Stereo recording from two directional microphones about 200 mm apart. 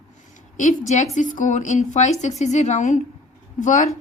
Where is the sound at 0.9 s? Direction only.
35° left (ahead or behind).